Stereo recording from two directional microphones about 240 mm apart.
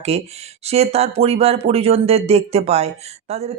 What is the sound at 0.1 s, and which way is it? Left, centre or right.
Speech, right.